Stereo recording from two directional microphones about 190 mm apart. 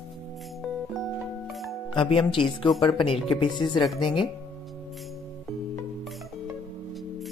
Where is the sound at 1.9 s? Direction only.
25° left (ahead or behind).